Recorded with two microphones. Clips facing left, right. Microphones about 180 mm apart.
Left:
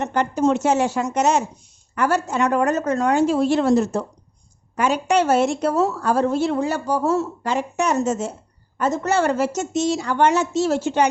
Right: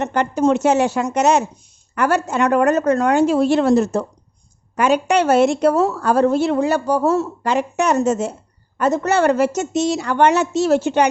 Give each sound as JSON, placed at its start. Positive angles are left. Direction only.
{"t": 0.0, "sound": "a woman's voice", "side_deg": -70}